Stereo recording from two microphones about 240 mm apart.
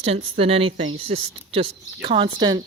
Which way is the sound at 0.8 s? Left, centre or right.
Right.